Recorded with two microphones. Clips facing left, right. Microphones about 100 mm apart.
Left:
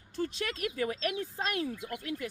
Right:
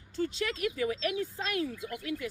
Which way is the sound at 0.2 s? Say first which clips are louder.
Right 2 dB; 45° left (ahead or behind).